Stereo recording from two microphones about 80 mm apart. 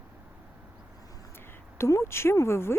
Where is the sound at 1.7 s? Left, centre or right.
Left.